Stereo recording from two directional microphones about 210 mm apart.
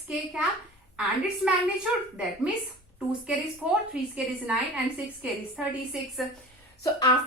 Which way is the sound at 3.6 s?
5° right (ahead or behind).